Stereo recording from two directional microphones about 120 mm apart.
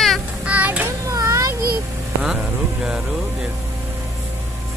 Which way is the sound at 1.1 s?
30° right (ahead or behind).